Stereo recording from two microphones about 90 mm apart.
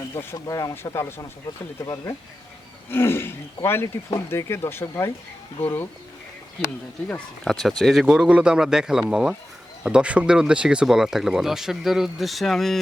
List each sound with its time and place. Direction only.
0.1 s speech: 30° left (ahead or behind)
1.8 s speech: 40° left (ahead or behind)
2.9 s speech: 25° left (ahead or behind)
7.4 s a man's voice: 5° left (ahead or behind)